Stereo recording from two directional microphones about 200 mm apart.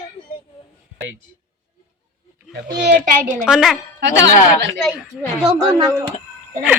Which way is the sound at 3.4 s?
Centre (ahead or behind).